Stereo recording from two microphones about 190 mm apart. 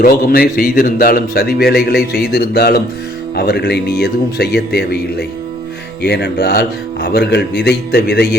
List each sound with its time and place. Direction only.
0.0 s a man's voice: 50° left (ahead or behind)